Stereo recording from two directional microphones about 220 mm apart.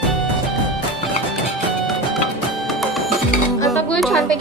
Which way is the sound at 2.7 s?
Centre (ahead or behind).